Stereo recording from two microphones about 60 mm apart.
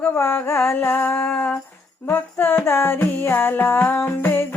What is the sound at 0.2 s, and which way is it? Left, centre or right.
Mantra, left.